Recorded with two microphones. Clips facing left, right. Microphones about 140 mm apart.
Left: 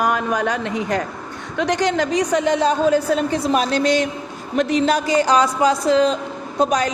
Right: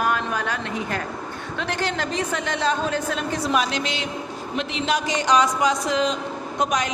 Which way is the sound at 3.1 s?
40° left (ahead or behind).